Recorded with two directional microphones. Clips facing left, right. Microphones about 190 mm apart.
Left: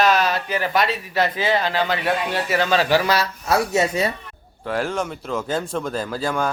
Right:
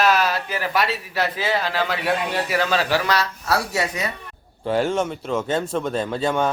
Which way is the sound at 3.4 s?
20° left (ahead or behind).